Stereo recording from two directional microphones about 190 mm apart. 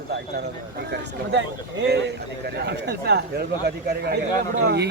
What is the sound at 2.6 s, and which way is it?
Speech, 60° right (ahead or behind).